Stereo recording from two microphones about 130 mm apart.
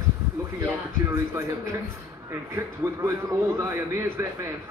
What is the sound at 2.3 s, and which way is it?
A man's voice, 20° right (ahead or behind).